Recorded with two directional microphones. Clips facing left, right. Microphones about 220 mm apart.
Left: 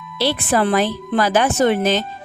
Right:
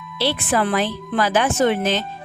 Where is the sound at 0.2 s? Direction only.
40° left (ahead or behind).